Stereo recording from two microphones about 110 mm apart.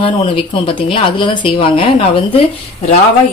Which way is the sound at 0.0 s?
55° left (ahead or behind).